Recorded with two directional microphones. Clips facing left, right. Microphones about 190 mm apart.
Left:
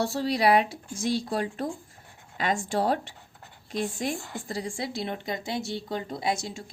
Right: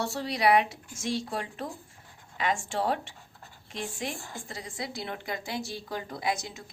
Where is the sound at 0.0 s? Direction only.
35° left (ahead or behind).